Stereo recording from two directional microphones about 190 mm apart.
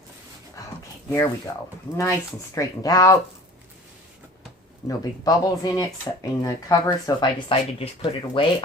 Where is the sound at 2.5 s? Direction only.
20° left (ahead or behind).